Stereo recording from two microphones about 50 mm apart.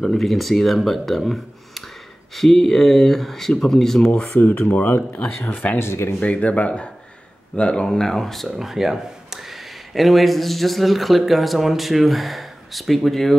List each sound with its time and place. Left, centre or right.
0.0 s speech: centre
4.0 s speech: left
4.4 s speech: left
5.8 s speech: left
6.1 s speech: left; by 8.5 s centre
8.5 s speech: centre